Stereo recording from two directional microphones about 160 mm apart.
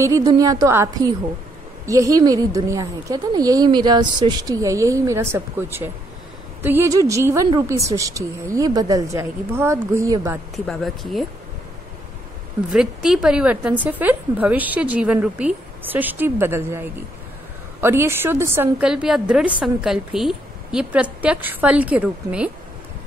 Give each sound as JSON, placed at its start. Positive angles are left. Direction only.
{"t": 0.0, "sound": "a woman's voice", "side_deg": -20}
{"t": 10.5, "sound": "a woman's voice", "side_deg": 0}
{"t": 12.7, "sound": "a woman's voice", "side_deg": -5}